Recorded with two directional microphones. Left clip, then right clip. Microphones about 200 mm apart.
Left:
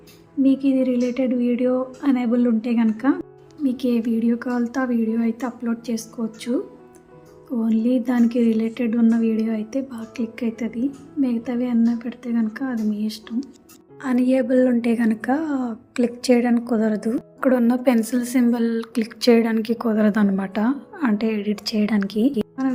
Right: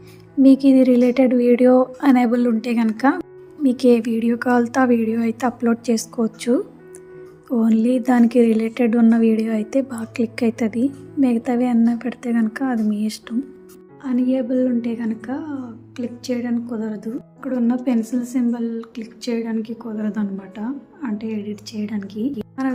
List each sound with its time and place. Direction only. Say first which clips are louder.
0.4 s a woman's voice: right 6 dB; 30° right (ahead or behind)
14.0 s a woman's voice: left 1 dB; 30° left (ahead or behind)
22.6 s a woman's voice: right 3 dB; 25° right (ahead or behind)